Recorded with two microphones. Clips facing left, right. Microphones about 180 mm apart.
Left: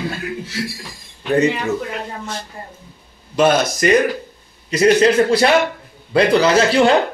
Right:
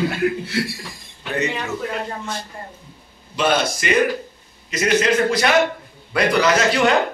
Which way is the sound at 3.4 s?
45° left (ahead or behind).